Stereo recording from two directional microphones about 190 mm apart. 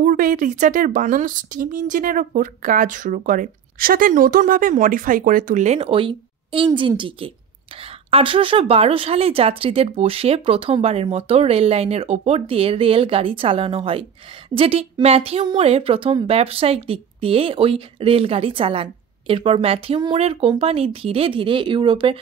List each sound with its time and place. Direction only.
0.0 s a woman's voice: 45° right (ahead or behind); by 22.2 s 25° right (ahead or behind)